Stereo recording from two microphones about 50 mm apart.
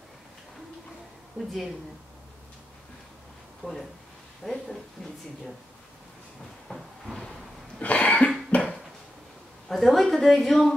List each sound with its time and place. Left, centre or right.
3.6 s speech: left
4.4 s speech: centre
6.7 s a sound: centre
7.8 s cough: left
8.5 s a sound: left
9.7 s speech: centre